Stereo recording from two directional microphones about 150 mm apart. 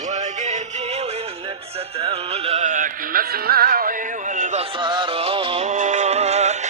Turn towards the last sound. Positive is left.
turn(degrees=-45)  # may be behind; listen again after turning